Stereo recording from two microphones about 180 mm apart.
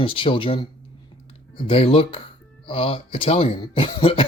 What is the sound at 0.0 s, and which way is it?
Speech, 30° left (ahead or behind).